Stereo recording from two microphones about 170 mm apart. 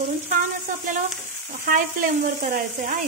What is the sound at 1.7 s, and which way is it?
Speech, 55° right (ahead or behind).